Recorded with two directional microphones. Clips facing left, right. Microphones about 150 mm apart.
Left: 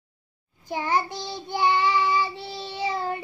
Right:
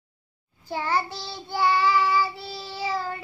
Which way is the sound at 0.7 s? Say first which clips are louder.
Left 1 dB; 15° left (ahead or behind).